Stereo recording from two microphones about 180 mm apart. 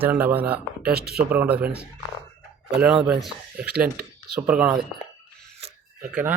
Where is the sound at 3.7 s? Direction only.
55° right (ahead or behind).